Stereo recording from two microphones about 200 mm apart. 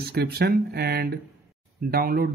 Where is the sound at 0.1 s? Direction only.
55° right (ahead or behind).